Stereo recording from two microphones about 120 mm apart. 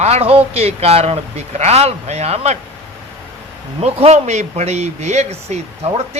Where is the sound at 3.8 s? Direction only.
65° right (ahead or behind).